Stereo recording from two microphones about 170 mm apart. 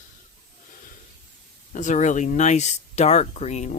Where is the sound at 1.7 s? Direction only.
45° left (ahead or behind).